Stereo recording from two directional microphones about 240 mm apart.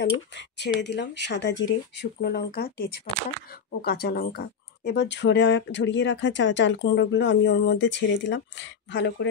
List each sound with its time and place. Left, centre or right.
0.0 s speech: left